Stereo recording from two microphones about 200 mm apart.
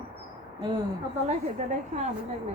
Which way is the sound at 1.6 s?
35° right (ahead or behind).